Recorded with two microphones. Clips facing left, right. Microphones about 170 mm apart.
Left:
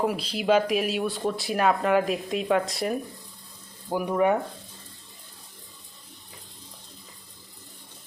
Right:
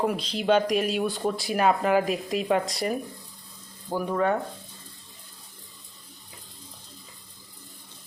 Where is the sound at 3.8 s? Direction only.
15° left (ahead or behind).